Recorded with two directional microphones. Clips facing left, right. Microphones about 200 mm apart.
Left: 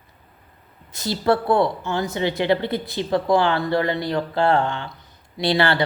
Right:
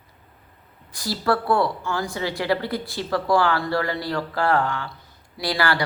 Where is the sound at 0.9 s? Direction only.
20° left (ahead or behind).